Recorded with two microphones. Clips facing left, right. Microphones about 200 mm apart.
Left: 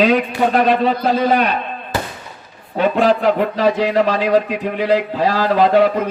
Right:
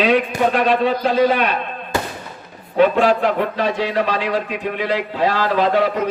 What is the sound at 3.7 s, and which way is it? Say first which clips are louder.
A man's voice: left 4 dB; 45° left (ahead or behind).